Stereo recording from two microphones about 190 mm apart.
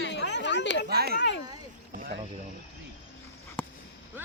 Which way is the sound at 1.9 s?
50° right (ahead or behind).